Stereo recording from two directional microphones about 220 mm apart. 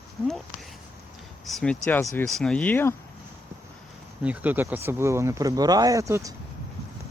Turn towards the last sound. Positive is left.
turn(degrees=-15)  # may be behind; listen again after turning